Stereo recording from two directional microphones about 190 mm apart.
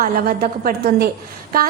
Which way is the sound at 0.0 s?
50° right (ahead or behind).